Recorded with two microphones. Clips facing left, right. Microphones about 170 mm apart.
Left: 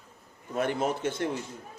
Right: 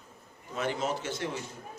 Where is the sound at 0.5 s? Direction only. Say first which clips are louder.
Left 3 dB; 55° left (ahead or behind).